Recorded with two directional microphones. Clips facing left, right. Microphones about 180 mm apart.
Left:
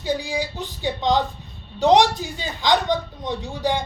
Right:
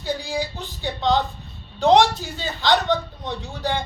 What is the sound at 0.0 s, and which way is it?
A man's voice, 15° left (ahead or behind).